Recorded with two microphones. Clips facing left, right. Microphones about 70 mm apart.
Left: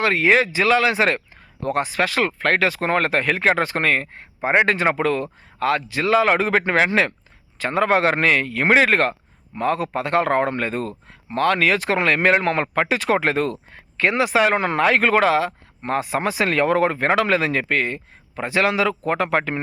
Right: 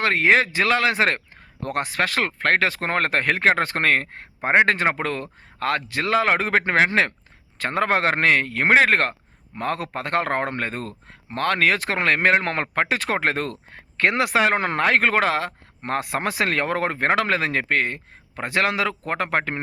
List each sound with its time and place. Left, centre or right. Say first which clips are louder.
0.0 s a man's voice: left 1 dB; right
7.6 s a man's voice: left 3 dB; right